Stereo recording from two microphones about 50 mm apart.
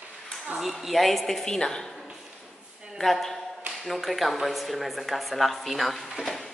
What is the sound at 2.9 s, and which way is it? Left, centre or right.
A woman's voice, centre.